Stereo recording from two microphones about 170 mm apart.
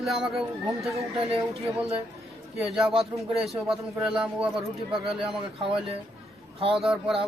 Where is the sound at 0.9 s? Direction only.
35° right (ahead or behind).